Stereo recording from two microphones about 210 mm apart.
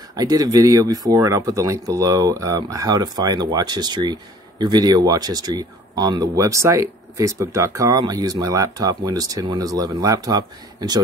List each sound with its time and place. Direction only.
0.1 s speech: 20° right (ahead or behind)